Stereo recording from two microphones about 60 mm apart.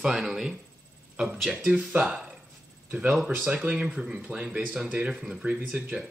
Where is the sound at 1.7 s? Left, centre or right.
Right.